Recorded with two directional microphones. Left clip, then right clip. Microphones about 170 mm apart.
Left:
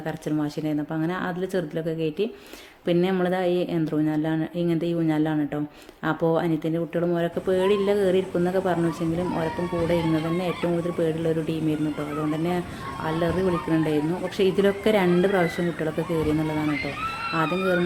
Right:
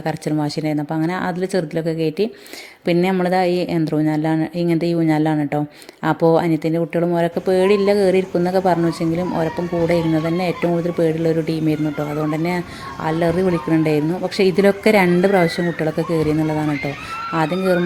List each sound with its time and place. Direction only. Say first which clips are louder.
0.3 s a woman's voice: right 4 dB; 35° right (ahead or behind)
10.4 s a woman's voice: right 6 dB; 35° right (ahead or behind)
13.1 s a woman's voice: right 6 dB; 35° right (ahead or behind)
17.3 s a woman's voice: right 6 dB; 35° right (ahead or behind)